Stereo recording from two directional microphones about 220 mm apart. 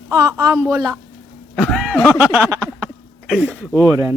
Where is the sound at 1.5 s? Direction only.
Centre (ahead or behind).